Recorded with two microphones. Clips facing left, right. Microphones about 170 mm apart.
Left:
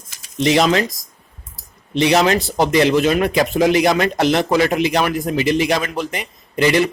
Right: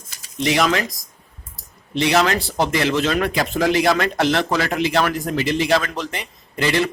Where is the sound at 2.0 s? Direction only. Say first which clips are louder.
Left 3 dB; 20° left (ahead or behind).